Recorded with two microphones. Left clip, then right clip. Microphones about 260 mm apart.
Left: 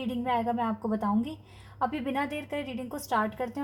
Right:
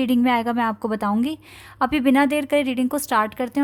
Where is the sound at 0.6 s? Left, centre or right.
Right.